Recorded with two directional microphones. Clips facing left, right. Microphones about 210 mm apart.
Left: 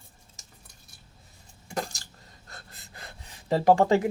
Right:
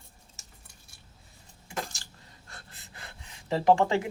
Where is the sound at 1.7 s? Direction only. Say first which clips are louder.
Left 4 dB; 40° left (ahead or behind).